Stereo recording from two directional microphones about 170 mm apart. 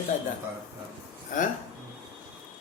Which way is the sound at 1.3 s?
50° left (ahead or behind).